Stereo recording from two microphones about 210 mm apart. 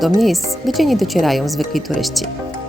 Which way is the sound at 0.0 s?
Centre (ahead or behind).